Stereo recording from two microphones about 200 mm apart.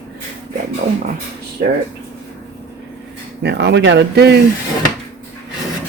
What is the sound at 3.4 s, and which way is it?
Speech, 60° right (ahead or behind).